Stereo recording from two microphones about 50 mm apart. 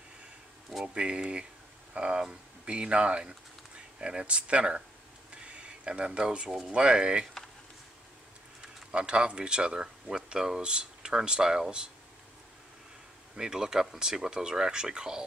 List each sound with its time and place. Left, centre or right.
0.8 s speech: right
5.3 s a sound: right
6.7 s speech: centre
8.9 s speech: centre
13.4 s speech: centre